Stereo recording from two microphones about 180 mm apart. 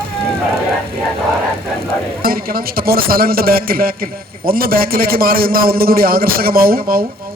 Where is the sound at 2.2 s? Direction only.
55° right (ahead or behind).